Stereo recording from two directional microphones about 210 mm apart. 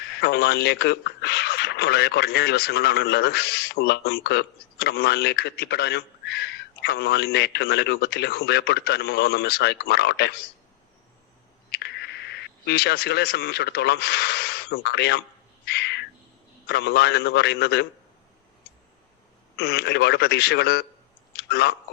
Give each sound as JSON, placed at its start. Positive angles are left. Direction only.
{"t": 0.0, "sound": "a man's voice", "side_deg": 50}
{"t": 11.7, "sound": "speech", "side_deg": 55}
{"t": 15.6, "sound": "bird", "side_deg": 50}
{"t": 16.6, "sound": "a man's voice", "side_deg": 50}
{"t": 19.5, "sound": "a man's voice", "side_deg": 50}
{"t": 21.3, "sound": "clicking", "side_deg": 50}